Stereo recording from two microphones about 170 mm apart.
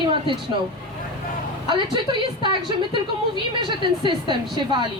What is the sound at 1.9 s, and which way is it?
A woman's voice, 30° right (ahead or behind).